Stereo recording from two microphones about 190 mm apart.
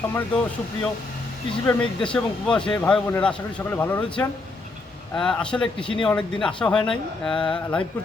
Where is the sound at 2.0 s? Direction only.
5° left (ahead or behind).